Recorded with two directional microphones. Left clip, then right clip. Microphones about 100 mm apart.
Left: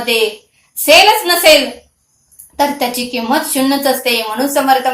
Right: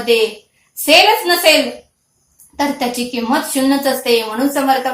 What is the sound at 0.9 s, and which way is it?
Speech, 35° left (ahead or behind).